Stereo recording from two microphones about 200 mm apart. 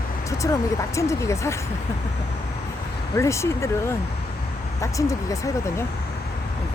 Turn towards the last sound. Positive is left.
turn(degrees=15)  # may be behind; listen again after turning